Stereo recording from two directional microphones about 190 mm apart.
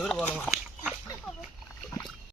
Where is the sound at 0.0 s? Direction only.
5° left (ahead or behind).